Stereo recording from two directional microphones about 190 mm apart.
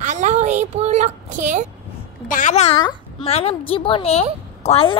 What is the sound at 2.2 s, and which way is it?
A woman's voice, 40° left (ahead or behind).